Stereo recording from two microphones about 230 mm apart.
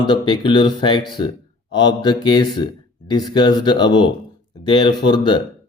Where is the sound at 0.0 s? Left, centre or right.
Centre.